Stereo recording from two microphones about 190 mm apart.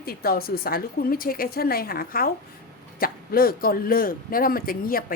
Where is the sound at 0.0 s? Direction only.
55° left (ahead or behind).